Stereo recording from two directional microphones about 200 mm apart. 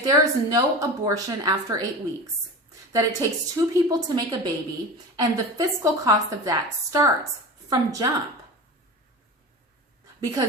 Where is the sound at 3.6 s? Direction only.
20° right (ahead or behind).